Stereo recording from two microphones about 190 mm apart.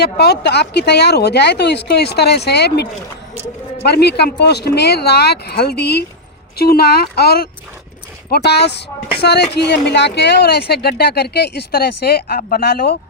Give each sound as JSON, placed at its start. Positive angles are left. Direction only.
{"t": 0.0, "sound": "speech", "side_deg": 60}
{"t": 3.8, "sound": "speech", "side_deg": 60}